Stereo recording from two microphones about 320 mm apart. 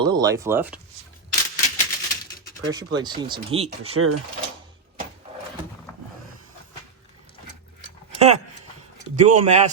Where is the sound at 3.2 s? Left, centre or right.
Centre.